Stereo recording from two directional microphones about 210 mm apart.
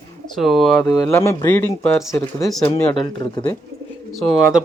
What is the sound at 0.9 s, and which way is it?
Speech, 15° left (ahead or behind).